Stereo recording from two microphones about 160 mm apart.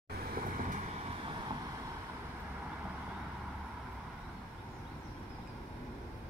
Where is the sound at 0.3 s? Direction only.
60° right (ahead or behind).